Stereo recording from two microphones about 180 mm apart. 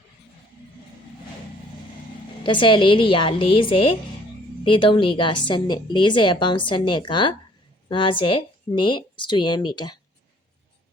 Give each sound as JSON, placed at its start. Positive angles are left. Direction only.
{"t": 2.4, "sound": "a woman's voice", "side_deg": 25}